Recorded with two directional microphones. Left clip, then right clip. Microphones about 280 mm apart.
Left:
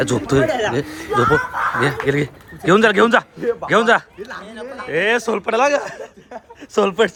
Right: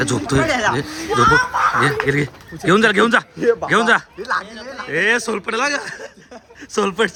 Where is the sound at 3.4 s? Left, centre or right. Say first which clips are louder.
Right 5 dB; right.